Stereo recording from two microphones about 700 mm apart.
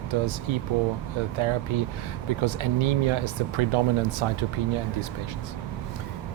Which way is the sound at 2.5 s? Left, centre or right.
Right.